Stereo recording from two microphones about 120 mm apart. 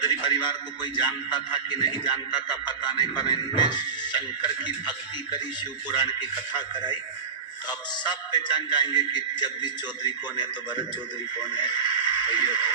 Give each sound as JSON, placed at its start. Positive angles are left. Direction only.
{"t": 0.0, "sound": "a man's voice", "side_deg": 40}
{"t": 1.3, "sound": "music", "side_deg": 40}
{"t": 7.7, "sound": "music", "side_deg": 35}
{"t": 11.3, "sound": "speech", "side_deg": 40}